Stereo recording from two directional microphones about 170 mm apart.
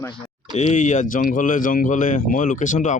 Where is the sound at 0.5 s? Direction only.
45° left (ahead or behind).